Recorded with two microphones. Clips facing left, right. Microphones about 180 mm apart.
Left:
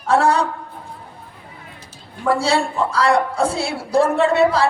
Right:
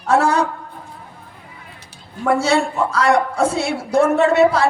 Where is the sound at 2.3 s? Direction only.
30° left (ahead or behind).